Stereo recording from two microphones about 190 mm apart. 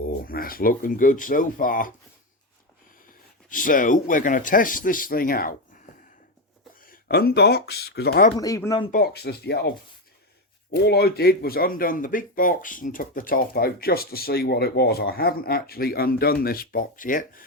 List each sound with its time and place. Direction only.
0.3 s speech: 50° left (ahead or behind)
3.5 s speech: 45° left (ahead or behind)
8.4 s speech: 15° left (ahead or behind)
8.9 s speech: 55° left (ahead or behind)